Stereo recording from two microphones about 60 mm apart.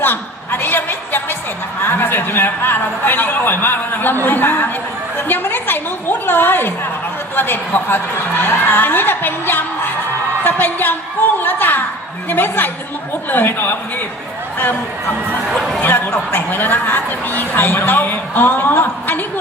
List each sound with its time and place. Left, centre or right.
0.0 s a woman's voice: left
15.8 s a man's voice: left